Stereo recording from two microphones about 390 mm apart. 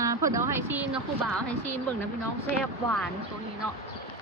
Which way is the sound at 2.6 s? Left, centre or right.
Centre.